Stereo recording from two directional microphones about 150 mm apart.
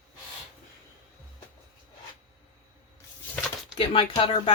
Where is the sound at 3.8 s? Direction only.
35° left (ahead or behind).